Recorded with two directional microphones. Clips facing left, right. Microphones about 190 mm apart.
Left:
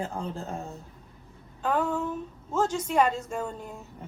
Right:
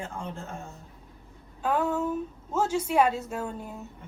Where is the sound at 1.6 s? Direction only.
10° right (ahead or behind).